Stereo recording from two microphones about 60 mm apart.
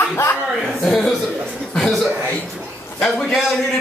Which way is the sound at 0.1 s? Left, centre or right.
Left.